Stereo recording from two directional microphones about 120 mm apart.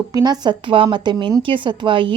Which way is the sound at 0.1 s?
35° right (ahead or behind).